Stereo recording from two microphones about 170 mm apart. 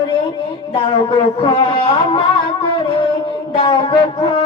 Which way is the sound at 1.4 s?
30° left (ahead or behind).